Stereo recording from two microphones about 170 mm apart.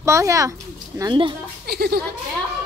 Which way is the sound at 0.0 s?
15° right (ahead or behind).